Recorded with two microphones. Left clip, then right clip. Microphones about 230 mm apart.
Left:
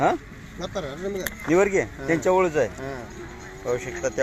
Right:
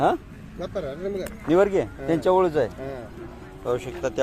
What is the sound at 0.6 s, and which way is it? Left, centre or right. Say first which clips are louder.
Speech: right 1 dB; left.